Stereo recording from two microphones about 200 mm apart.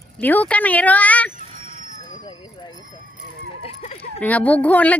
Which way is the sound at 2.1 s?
20° left (ahead or behind).